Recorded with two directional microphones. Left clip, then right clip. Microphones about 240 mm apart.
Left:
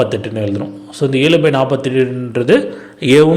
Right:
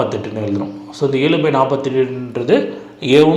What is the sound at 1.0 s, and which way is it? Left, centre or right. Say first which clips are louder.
A man's voice: left 3 dB; left.